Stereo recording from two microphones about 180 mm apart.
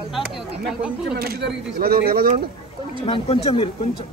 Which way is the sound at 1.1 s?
60° right (ahead or behind).